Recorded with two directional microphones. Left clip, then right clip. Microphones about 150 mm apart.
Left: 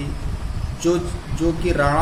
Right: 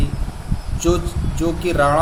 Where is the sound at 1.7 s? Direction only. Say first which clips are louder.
Right 4 dB; 5° right (ahead or behind).